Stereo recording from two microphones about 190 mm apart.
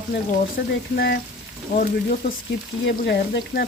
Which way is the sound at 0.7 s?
65° left (ahead or behind).